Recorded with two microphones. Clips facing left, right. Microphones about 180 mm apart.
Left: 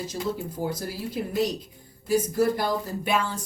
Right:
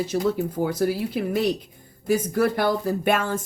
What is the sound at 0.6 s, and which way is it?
Speech, 60° right (ahead or behind).